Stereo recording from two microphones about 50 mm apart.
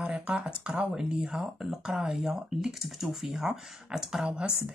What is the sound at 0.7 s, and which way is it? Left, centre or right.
Speech, centre.